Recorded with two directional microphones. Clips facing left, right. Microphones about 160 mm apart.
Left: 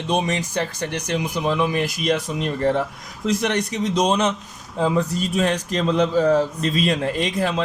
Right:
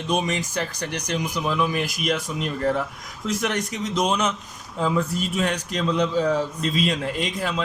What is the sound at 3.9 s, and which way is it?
Speech, 35° left (ahead or behind).